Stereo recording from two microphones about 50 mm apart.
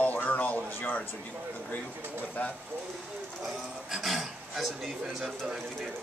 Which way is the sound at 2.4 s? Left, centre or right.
Left.